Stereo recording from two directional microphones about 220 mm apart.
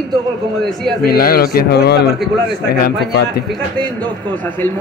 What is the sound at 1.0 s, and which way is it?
Speech, 40° left (ahead or behind).